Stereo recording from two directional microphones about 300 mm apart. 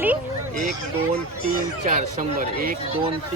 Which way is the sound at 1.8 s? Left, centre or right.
Right.